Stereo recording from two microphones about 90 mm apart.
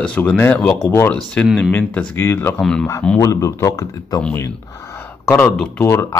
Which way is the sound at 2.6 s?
10° left (ahead or behind).